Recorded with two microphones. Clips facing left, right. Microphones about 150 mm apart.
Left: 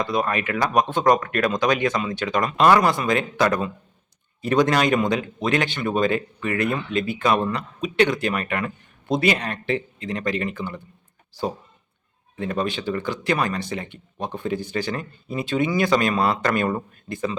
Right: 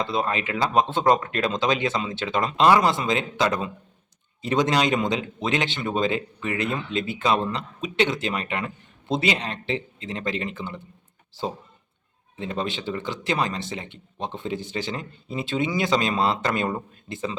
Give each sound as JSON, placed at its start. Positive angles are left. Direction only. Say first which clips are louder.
{"t": 0.0, "sound": "speech", "louder": "left 2 dB", "side_deg": -25}
{"t": 12.4, "sound": "speech", "louder": "left 3 dB", "side_deg": -25}